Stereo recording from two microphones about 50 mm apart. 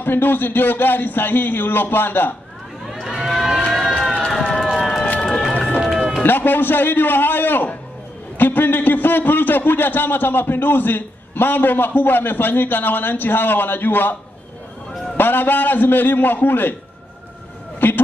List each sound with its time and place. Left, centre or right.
0.0 s a man's voice: left
3.2 s a sound: centre
4.3 s run: centre
6.2 s a man's voice: left
15.1 s a man's voice: left
17.7 s a sound: left